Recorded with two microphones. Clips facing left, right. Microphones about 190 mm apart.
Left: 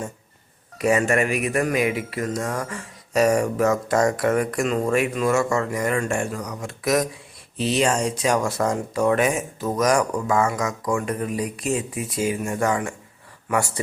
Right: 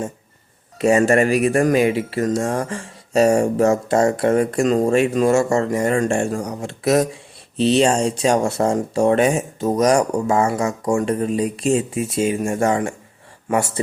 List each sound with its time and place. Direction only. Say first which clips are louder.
0.8 s speech: right 5 dB; 30° right (ahead or behind)